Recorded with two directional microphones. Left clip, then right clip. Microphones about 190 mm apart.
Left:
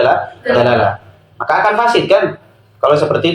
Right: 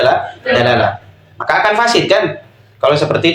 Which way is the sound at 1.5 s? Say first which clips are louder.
Even; 20° right (ahead or behind).